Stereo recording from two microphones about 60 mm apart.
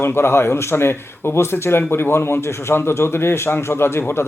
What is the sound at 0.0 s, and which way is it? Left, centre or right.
Speech, left.